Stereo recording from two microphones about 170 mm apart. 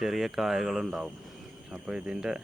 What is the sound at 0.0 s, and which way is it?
Speech, centre (ahead or behind).